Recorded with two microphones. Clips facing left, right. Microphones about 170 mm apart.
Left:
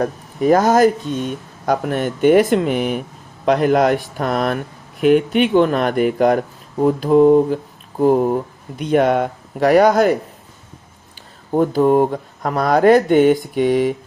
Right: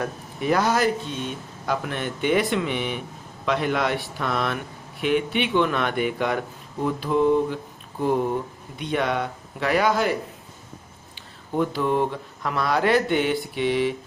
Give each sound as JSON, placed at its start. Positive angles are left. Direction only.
{"t": 0.0, "sound": "speech", "side_deg": 40}
{"t": 11.5, "sound": "speech", "side_deg": 40}